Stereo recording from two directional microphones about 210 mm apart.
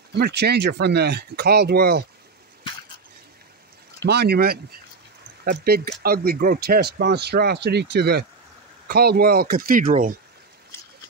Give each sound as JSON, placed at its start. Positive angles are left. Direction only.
{"t": 0.1, "sound": "speech", "side_deg": -55}
{"t": 4.0, "sound": "speech", "side_deg": -50}